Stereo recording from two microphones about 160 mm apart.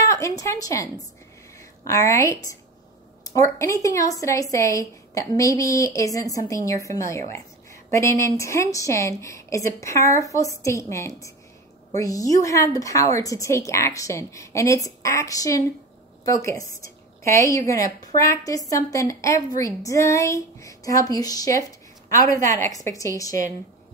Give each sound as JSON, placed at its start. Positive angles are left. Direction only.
{"t": 0.0, "sound": "a woman's voice", "side_deg": 20}